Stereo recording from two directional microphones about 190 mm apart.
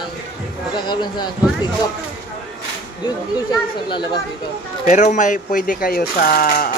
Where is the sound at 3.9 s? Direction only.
25° left (ahead or behind).